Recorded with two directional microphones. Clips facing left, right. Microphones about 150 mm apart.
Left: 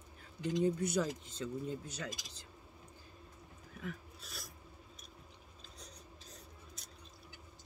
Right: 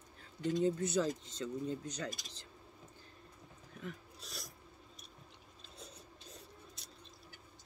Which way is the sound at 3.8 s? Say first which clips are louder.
Left 1 dB; centre (ahead or behind).